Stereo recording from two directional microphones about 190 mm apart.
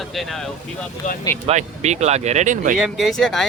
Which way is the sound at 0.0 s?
Centre (ahead or behind).